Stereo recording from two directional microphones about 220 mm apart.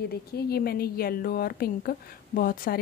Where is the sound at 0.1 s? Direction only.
45° left (ahead or behind).